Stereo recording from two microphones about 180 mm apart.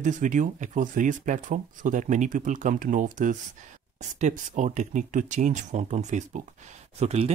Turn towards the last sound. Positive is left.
turn(degrees=-35)  # may be behind; listen again after turning